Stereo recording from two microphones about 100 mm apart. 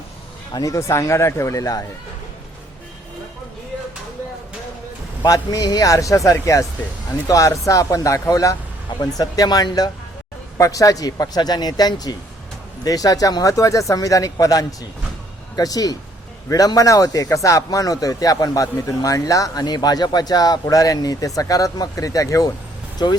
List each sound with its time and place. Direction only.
0.5 s speech: 35° left (ahead or behind)
5.2 s speech: 40° left (ahead or behind)